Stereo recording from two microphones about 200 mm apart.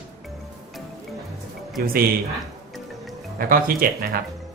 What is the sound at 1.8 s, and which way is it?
Speech, 50° right (ahead or behind).